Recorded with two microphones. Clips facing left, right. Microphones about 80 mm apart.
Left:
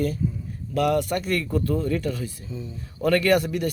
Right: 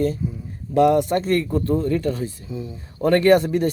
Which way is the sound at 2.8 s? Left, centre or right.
Right.